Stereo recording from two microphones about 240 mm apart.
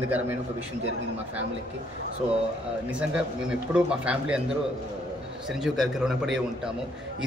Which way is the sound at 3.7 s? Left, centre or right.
Centre.